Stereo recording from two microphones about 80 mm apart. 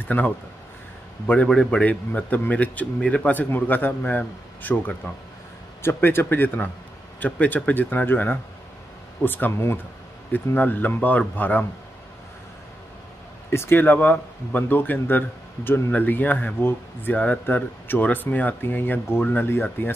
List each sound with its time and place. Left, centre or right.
0.1 s speech: left
1.2 s speech: centre
13.5 s speech: left